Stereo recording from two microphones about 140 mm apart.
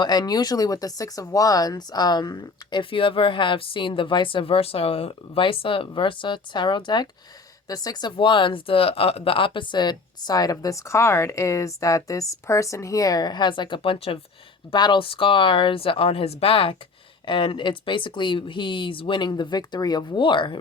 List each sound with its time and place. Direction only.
0.0 s speech: 30° left (ahead or behind)